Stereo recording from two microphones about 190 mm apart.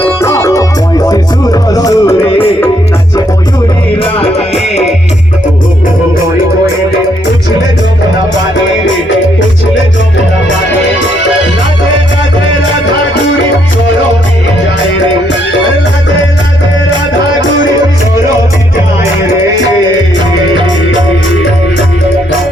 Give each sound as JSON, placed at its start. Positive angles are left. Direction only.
{"t": 0.0, "sound": "music", "side_deg": 15}
{"t": 4.0, "sound": "music", "side_deg": 30}